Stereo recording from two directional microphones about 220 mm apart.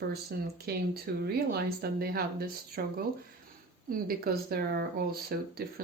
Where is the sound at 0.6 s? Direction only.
45° right (ahead or behind).